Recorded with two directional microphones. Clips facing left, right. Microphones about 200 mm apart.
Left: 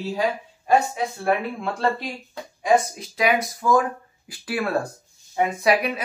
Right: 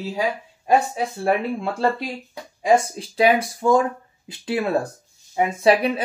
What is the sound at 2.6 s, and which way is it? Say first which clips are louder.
Speech: right 2 dB; 30° right (ahead or behind).